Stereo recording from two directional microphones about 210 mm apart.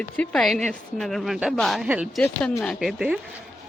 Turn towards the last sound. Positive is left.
turn(degrees=0)  # may be behind; listen again after turning